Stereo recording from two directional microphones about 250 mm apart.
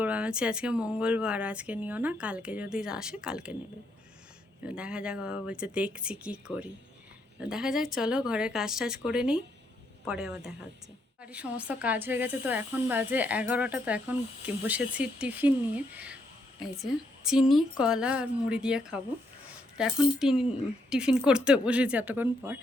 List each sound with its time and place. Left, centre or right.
0.0 s speech: centre
4.7 s speech: centre